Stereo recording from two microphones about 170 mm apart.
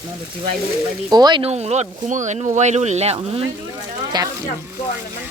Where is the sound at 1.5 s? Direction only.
40° right (ahead or behind).